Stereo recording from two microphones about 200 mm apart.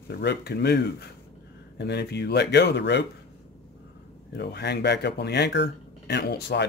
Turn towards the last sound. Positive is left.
turn(degrees=55)  # may be behind; listen again after turning